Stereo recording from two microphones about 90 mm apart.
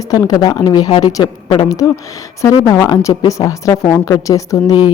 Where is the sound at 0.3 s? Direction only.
45° left (ahead or behind).